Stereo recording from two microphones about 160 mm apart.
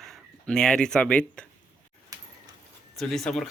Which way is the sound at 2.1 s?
20° right (ahead or behind).